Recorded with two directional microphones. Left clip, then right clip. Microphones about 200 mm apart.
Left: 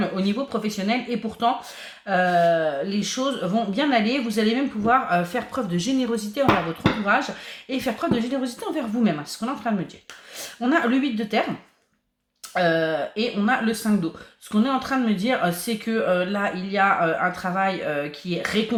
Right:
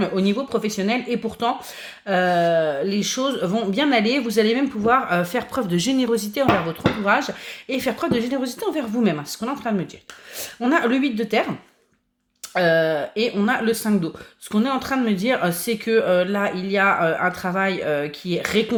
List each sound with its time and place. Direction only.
0.0 s speech: 40° right (ahead or behind)
12.5 s speech: 40° right (ahead or behind)